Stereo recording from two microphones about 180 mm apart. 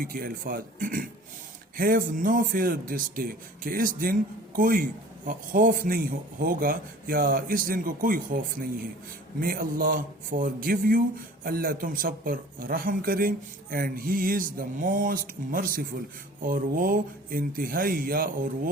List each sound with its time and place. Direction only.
0.0 s speech: 50° right (ahead or behind)